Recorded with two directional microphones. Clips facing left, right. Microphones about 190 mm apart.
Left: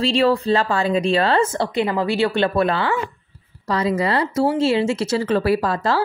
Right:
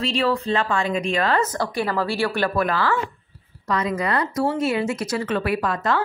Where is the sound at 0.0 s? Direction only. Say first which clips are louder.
Left 5 dB; 30° left (ahead or behind).